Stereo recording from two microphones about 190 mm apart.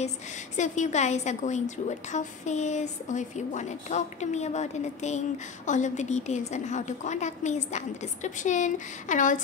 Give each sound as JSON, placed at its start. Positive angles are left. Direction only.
{"t": 0.6, "sound": "a woman's voice", "side_deg": 40}